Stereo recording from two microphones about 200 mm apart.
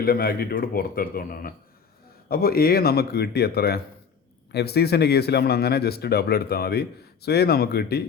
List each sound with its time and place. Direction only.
0.0 s a man's voice: 50° left (ahead or behind)